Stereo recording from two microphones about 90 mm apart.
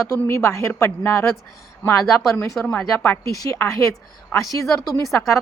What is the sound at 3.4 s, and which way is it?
A woman's voice, 35° left (ahead or behind).